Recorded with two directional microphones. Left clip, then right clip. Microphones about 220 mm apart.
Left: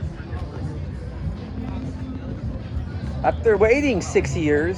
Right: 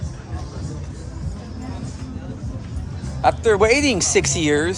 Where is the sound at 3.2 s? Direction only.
15° right (ahead or behind).